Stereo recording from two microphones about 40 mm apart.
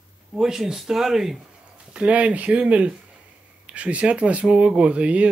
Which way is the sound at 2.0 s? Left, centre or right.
Right.